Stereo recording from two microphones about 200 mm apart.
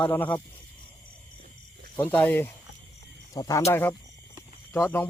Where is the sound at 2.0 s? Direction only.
10° left (ahead or behind).